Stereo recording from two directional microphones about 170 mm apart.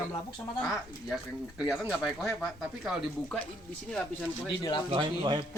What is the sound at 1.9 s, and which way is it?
Speech, centre (ahead or behind).